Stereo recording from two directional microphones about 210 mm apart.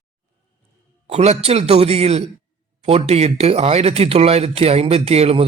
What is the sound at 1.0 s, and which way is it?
Speech, 30° right (ahead or behind).